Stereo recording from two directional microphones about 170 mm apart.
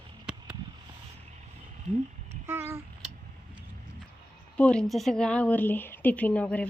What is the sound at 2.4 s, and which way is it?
Speech, 15° right (ahead or behind).